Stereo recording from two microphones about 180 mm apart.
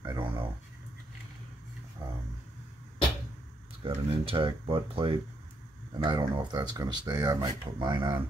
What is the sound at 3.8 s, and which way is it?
Speech, 30° right (ahead or behind).